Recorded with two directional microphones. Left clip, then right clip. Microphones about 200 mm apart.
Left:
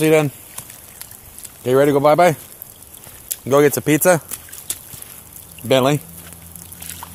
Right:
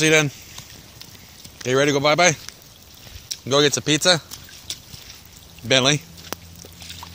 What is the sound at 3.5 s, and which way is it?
Speech, 10° left (ahead or behind).